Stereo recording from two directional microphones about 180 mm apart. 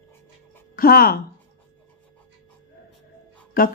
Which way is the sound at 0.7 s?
55° left (ahead or behind).